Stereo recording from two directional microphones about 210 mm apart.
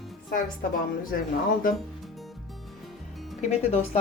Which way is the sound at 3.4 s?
30° left (ahead or behind).